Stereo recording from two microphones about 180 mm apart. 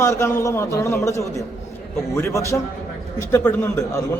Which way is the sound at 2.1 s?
15° left (ahead or behind).